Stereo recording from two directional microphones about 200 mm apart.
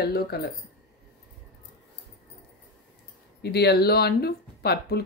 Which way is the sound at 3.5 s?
55° left (ahead or behind).